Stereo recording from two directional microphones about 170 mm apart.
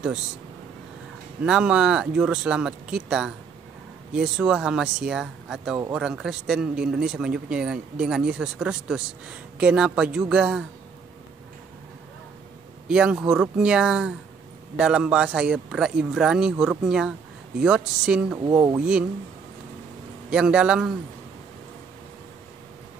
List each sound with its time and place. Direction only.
1.4 s speech: 5° right (ahead or behind)
12.8 s speech: 5° right (ahead or behind)
18.5 s speech: 20° right (ahead or behind)
20.2 s speech: 5° right (ahead or behind)